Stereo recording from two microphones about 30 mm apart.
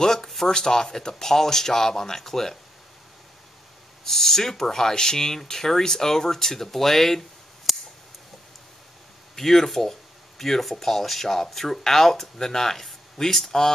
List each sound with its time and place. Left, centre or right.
0.0 s speech: left
4.0 s speech: centre
9.3 s speech: centre